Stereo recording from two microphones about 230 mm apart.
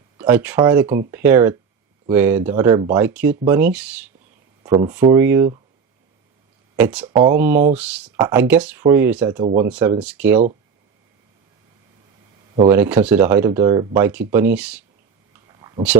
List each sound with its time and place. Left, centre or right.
0.2 s speech: centre
5.1 s speech: centre
6.7 s speech: centre
12.6 s speech: centre
15.4 s a sound: centre